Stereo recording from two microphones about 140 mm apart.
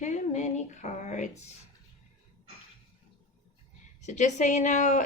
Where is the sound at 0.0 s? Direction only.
55° left (ahead or behind).